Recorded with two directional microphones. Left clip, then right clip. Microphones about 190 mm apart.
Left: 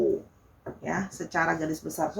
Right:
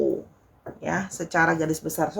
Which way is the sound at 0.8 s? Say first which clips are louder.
Right 4 dB; 50° right (ahead or behind).